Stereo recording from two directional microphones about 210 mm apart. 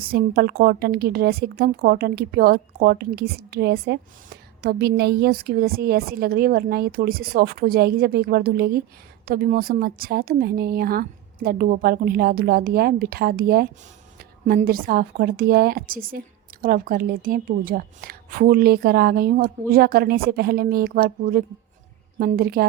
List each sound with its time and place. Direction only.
0.0 s a woman's voice: 45° right (ahead or behind)